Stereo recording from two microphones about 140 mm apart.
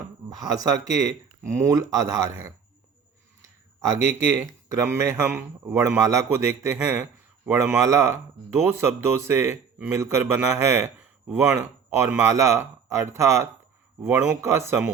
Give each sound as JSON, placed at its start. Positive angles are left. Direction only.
{"t": 0.3, "sound": "a man's voice", "side_deg": -25}
{"t": 4.8, "sound": "a man's voice", "side_deg": -20}